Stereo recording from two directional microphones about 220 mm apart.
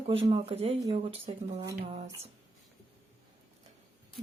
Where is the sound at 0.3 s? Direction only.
25° right (ahead or behind).